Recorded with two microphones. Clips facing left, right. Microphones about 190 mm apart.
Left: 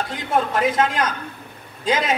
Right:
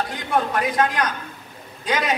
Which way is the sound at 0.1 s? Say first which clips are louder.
Left 4 dB; 25° left (ahead or behind).